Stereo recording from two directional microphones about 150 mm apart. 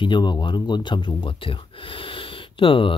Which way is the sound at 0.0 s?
30° left (ahead or behind).